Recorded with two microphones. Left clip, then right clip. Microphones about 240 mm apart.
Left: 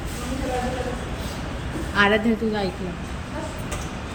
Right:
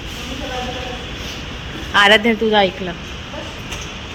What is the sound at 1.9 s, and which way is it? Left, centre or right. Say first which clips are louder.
Speech: right 8 dB; right.